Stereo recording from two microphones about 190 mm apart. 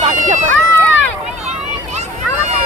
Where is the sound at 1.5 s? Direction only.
35° right (ahead or behind).